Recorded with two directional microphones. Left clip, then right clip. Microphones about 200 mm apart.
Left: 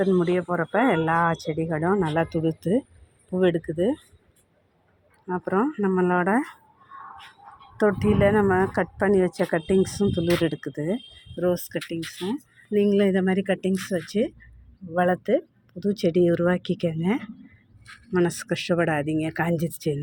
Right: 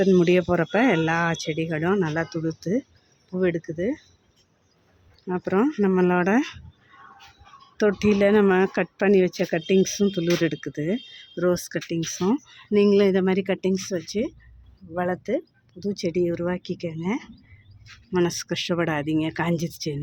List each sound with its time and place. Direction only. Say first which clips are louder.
0.0 s speech: right 3 dB; 30° right (ahead or behind); by 2.1 s 10° right (ahead or behind)
2.1 s speech: left 3 dB; 5° left (ahead or behind)
5.2 s speech: right 1 dB; 20° right (ahead or behind)
7.8 s speech: right 1 dB; 15° right (ahead or behind)